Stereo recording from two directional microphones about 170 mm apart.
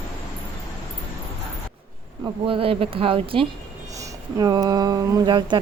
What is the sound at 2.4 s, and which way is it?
Speech, 30° right (ahead or behind).